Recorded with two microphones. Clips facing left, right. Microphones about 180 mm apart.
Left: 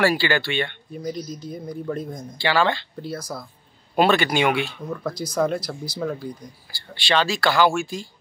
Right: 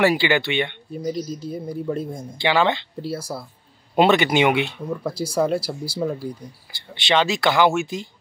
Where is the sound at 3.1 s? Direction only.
10° right (ahead or behind).